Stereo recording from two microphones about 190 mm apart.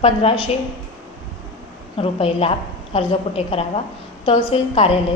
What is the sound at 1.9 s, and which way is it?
A woman's voice, 30° left (ahead or behind).